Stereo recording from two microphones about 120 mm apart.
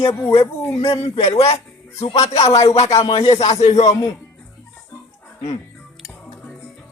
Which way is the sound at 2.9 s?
55° left (ahead or behind).